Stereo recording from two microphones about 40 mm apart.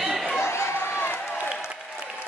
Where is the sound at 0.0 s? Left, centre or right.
Centre.